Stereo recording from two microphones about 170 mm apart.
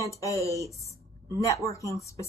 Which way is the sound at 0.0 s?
20° left (ahead or behind).